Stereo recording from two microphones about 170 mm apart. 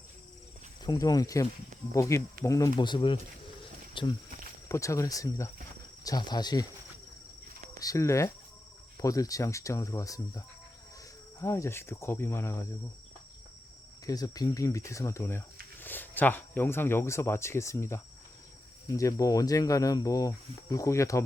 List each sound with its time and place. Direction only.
0.9 s speech: 20° left (ahead or behind)
4.7 s speech: 20° left (ahead or behind)
7.8 s speech: 20° left (ahead or behind)
14.1 s speech: 20° left (ahead or behind)